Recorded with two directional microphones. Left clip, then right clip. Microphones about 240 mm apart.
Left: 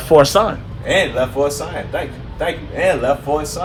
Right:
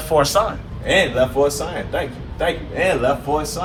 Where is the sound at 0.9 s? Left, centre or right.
Centre.